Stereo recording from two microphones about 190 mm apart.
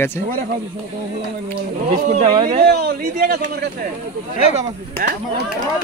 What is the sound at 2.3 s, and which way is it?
Speech, 25° right (ahead or behind).